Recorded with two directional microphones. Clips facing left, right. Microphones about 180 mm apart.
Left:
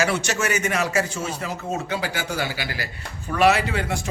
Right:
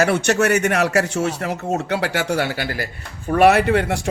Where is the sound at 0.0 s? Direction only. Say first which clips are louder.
Right 6 dB; 60° right (ahead or behind).